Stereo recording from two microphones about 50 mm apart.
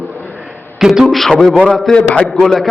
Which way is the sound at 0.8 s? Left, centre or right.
Centre.